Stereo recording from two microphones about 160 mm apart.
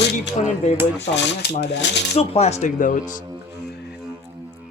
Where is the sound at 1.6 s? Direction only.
90° left.